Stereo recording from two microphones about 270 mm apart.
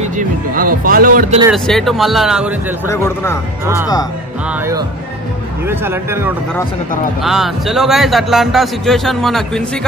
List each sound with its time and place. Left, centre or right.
0.0 s speech: right
1.5 s a man's voice: centre
2.9 s speech: centre
4.5 s a man's voice: centre